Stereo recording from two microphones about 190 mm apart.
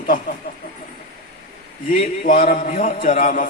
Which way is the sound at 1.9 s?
40° left (ahead or behind).